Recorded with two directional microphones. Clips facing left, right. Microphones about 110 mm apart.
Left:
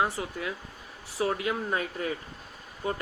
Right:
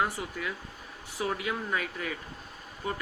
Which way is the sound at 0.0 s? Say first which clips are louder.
Left 2 dB; 25° left (ahead or behind).